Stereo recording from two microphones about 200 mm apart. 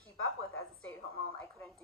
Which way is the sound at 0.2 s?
90° left.